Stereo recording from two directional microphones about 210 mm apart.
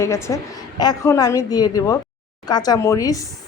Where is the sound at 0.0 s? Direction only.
15° left (ahead or behind).